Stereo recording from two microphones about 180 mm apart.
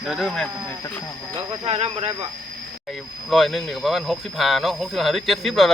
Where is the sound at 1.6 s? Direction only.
35° right (ahead or behind).